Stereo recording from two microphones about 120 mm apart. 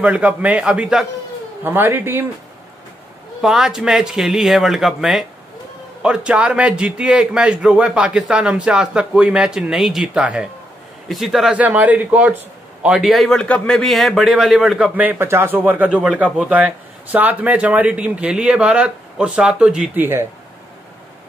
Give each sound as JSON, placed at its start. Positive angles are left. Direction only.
{"t": 0.0, "sound": "a man's voice", "side_deg": -10}
{"t": 1.6, "sound": "a man's voice", "side_deg": -20}
{"t": 3.3, "sound": "a man's voice", "side_deg": -5}
{"t": 15.0, "sound": "a man's voice", "side_deg": -15}